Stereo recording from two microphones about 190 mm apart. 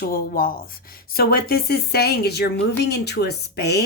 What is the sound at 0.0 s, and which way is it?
Speech, 50° left (ahead or behind).